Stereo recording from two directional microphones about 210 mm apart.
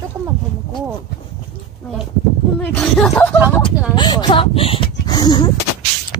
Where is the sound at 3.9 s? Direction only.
20° left (ahead or behind).